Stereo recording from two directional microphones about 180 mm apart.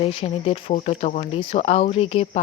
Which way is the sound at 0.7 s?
40° left (ahead or behind).